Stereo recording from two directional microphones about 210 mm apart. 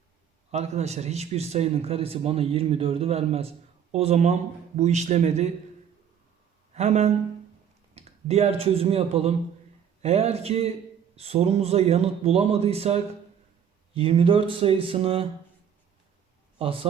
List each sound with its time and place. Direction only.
0.5 s a man's voice: 30° right (ahead or behind)
6.7 s a man's voice: 30° right (ahead or behind)
16.6 s speech: 25° right (ahead or behind)